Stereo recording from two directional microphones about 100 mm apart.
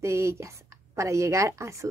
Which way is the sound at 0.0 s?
30° right (ahead or behind).